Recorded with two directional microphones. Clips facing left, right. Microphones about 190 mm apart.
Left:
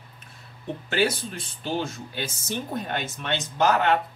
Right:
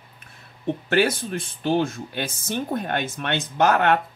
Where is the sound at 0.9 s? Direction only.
55° right (ahead or behind).